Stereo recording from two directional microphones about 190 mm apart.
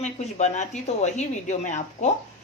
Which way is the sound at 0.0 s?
35° left (ahead or behind).